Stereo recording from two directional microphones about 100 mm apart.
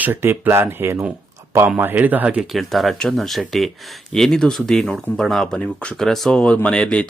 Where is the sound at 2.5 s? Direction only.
Centre (ahead or behind).